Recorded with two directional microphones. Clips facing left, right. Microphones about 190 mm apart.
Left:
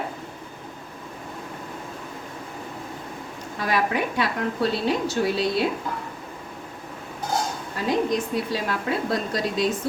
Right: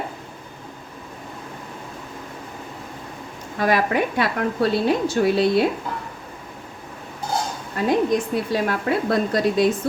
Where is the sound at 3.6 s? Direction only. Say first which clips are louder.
Right 4 dB; 50° right (ahead or behind).